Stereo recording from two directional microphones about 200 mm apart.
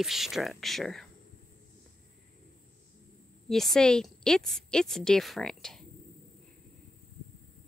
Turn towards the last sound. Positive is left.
turn(degrees=0)  # may be behind; listen again after turning